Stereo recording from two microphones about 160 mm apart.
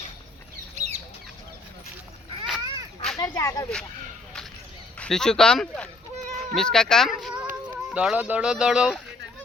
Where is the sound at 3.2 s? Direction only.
20° left (ahead or behind).